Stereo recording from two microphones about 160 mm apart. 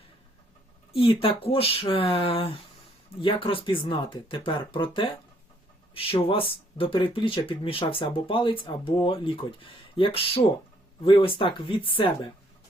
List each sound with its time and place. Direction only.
0.9 s speech: 35° left (ahead or behind)